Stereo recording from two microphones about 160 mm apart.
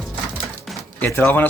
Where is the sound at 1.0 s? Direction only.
10° left (ahead or behind).